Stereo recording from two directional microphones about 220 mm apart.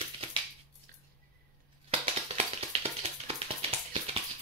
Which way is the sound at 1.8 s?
30° right (ahead or behind).